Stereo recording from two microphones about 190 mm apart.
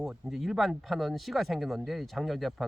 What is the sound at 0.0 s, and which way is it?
Speech, centre (ahead or behind).